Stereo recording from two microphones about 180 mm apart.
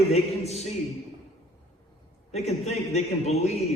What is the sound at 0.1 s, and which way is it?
Speech, 35° left (ahead or behind).